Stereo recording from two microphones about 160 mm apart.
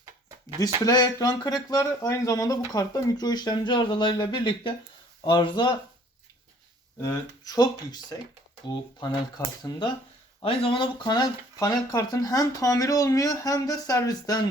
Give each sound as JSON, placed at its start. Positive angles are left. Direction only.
{"t": 0.9, "sound": "speech", "side_deg": 25}
{"t": 7.0, "sound": "speech", "side_deg": 20}
{"t": 10.4, "sound": "speech", "side_deg": 35}